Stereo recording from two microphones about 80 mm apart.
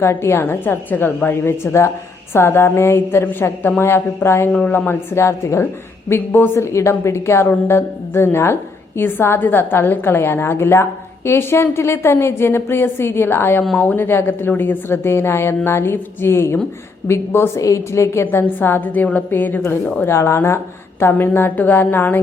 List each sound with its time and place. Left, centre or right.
0.0 s a woman's voice: left